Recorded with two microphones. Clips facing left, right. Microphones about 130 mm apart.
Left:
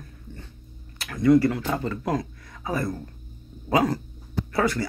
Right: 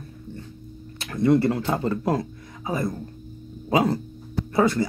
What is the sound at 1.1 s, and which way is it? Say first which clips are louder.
Speech: left 1 dB; 30° right (ahead or behind).